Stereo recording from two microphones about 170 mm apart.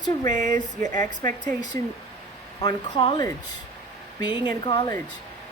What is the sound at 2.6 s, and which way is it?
Speech, 25° left (ahead or behind).